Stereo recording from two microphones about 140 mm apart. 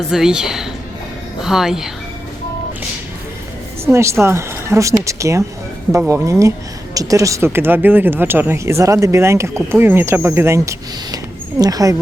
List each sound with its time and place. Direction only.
0.1 s speech: 5° right (ahead or behind)
3.9 s speech: 20° right (ahead or behind)